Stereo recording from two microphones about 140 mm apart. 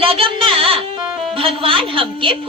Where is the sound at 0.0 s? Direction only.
40° right (ahead or behind).